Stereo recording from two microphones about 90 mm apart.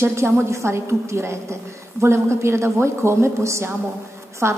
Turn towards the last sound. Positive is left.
turn(degrees=-30)  # may be behind; listen again after turning